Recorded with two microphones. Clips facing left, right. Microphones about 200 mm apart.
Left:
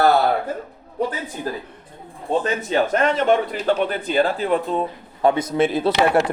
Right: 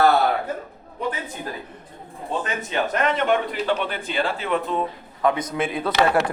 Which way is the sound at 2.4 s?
35° left (ahead or behind).